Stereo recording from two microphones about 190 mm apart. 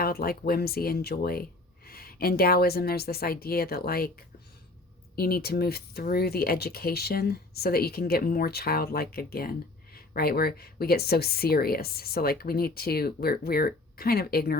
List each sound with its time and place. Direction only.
0.0 s speech: 50° left (ahead or behind)
5.1 s speech: 55° left (ahead or behind)